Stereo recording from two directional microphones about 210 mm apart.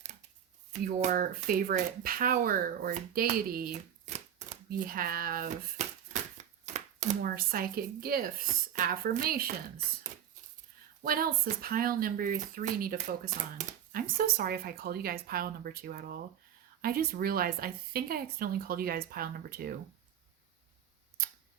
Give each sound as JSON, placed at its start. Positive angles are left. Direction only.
{"t": 0.7, "sound": "speech", "side_deg": -35}
{"t": 6.4, "sound": "a sound", "side_deg": -35}
{"t": 6.7, "sound": "speech", "side_deg": -35}
{"t": 11.0, "sound": "speech", "side_deg": -40}